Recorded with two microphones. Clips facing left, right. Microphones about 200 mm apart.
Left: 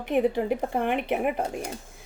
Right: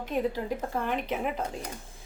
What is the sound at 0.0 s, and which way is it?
Speech, 65° left (ahead or behind).